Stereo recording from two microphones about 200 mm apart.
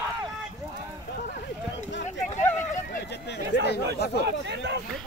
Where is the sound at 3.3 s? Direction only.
60° left (ahead or behind).